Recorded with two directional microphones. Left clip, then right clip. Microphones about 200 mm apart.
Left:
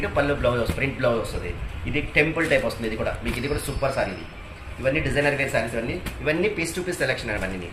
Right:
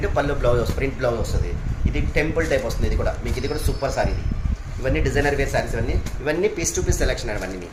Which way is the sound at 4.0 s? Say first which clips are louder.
Right 2 dB; 55° right (ahead or behind).